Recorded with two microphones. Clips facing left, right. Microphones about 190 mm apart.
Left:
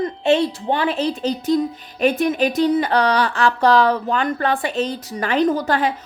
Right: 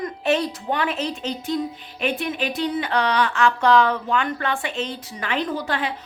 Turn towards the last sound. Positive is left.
turn(degrees=40)  # may be behind; listen again after turning